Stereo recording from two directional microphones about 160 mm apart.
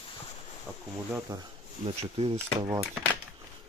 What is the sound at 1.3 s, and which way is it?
Speech, 20° right (ahead or behind).